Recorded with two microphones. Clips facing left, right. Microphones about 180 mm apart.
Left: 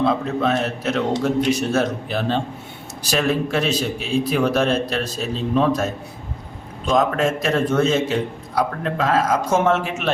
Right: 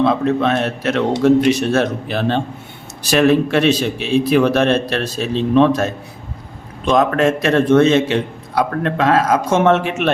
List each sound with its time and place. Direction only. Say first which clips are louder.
0.4 s a man's voice: right 3 dB; 70° right (ahead or behind)